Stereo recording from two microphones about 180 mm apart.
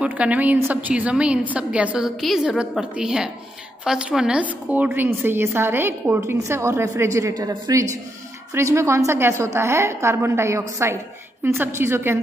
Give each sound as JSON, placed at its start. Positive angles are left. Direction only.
{"t": 0.0, "sound": "a woman's voice", "side_deg": -5}